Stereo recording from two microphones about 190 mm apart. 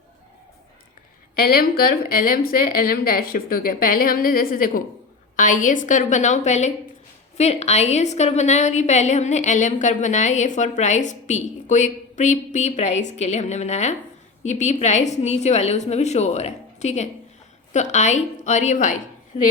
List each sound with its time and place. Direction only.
1.4 s a woman's voice: 50° left (ahead or behind)